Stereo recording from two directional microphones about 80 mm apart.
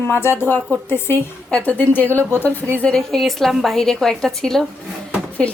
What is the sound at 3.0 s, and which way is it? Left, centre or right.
A woman's voice, centre.